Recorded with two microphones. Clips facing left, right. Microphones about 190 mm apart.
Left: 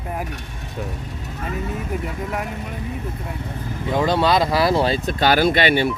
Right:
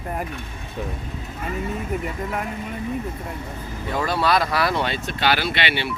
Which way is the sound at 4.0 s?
20° left (ahead or behind).